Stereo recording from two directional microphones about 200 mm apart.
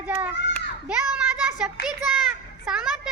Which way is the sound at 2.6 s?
5° right (ahead or behind).